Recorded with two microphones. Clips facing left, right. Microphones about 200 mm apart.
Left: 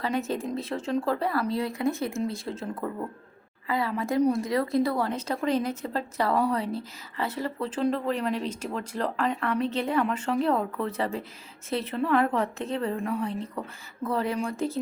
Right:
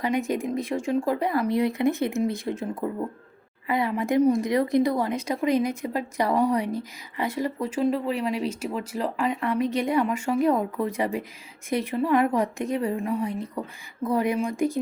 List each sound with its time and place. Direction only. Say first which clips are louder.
0.0 s a woman's voice: right 3 dB; 15° right (ahead or behind)